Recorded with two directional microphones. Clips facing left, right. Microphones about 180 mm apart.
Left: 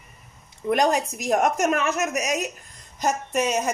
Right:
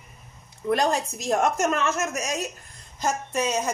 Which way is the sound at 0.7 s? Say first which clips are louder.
Left 2 dB; 15° left (ahead or behind).